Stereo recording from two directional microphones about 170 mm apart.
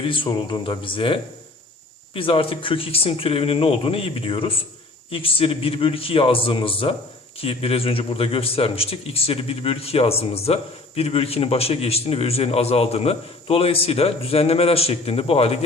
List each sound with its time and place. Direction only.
0.0 s a man's voice: 30° left (ahead or behind)